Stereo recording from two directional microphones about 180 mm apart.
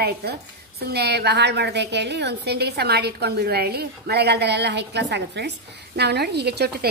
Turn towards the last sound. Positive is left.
turn(degrees=-65)  # may be behind; listen again after turning